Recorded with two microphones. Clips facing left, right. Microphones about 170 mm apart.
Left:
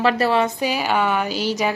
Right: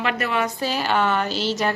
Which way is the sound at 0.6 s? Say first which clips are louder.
Left 1 dB; 10° left (ahead or behind).